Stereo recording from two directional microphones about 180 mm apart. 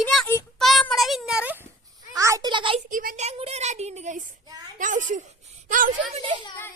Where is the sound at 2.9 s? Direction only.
55° right (ahead or behind).